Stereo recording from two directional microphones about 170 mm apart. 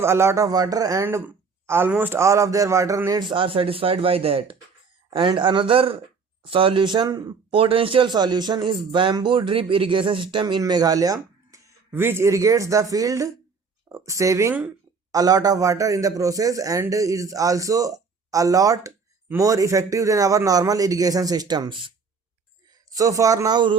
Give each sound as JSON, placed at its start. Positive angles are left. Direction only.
{"t": 0.0, "sound": "speech", "side_deg": -15}
{"t": 23.0, "sound": "speech", "side_deg": -20}